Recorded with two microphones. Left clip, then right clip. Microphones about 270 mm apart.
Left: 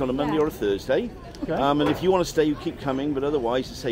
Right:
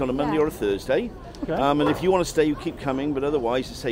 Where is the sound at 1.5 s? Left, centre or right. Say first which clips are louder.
Right 1 dB; right.